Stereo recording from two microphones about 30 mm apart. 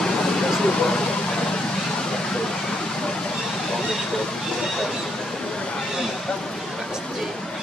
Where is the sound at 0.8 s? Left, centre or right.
Left.